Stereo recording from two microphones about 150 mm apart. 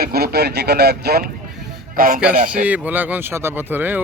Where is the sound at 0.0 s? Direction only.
90° right.